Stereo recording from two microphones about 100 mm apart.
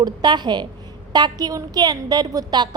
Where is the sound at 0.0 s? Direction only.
45° right (ahead or behind).